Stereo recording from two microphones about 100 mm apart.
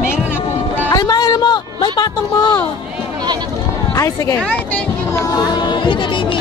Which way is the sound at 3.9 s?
35° left (ahead or behind).